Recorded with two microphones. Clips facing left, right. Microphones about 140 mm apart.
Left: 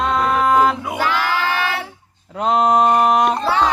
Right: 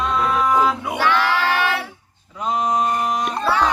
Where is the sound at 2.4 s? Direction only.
65° left (ahead or behind).